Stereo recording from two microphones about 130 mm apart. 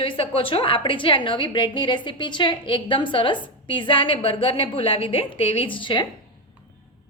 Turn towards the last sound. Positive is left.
turn(degrees=40)  # may be behind; listen again after turning